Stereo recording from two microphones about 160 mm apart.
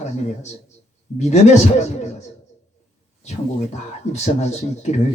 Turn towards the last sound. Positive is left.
turn(degrees=45)  # may be behind; listen again after turning